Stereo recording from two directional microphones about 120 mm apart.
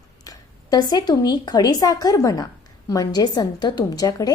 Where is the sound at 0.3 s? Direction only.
35° left (ahead or behind).